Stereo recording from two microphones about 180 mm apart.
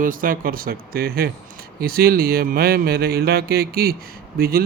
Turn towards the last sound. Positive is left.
turn(degrees=-55)  # may be behind; listen again after turning